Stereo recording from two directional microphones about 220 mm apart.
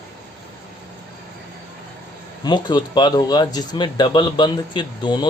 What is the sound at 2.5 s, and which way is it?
A man's voice, 20° left (ahead or behind).